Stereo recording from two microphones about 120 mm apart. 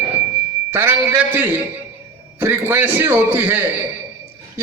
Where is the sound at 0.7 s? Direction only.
15° right (ahead or behind).